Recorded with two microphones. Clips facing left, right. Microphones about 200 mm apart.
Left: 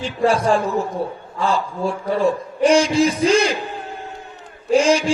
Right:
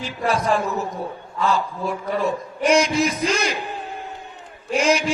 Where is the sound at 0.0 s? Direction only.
30° left (ahead or behind).